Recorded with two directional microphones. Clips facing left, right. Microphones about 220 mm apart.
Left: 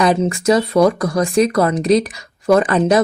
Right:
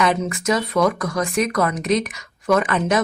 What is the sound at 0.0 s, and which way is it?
A woman's voice, 30° left (ahead or behind).